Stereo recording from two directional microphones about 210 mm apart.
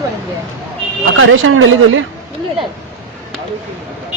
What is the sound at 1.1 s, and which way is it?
Speech, 75° right (ahead or behind).